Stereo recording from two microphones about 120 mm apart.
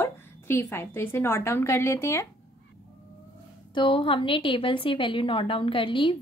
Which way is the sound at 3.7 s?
40° left (ahead or behind).